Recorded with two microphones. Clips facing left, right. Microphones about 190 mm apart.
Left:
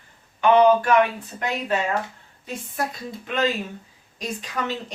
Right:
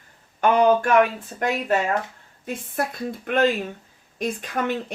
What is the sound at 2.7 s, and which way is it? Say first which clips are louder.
A woman's voice: right 2 dB; 55° right (ahead or behind).